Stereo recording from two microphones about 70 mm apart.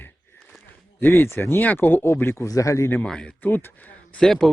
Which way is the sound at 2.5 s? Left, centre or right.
Left.